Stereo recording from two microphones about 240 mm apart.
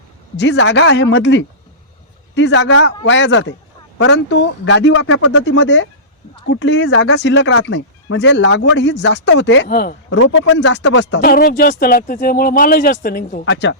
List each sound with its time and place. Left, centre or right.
0.3 s speech: left
9.6 s speech: left
10.1 s speech: left
13.4 s speech: left